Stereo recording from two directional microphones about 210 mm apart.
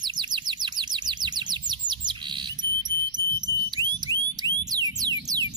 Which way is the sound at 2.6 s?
65° right (ahead or behind).